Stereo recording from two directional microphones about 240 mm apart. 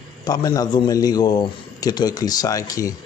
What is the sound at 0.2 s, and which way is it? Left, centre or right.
A man's voice, centre.